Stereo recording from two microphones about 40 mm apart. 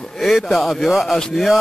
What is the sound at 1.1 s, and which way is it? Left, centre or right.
Speech, centre.